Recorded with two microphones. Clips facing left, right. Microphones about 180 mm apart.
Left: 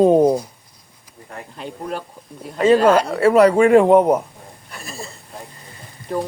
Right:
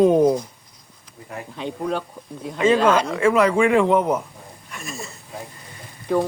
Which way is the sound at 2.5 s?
40° left (ahead or behind).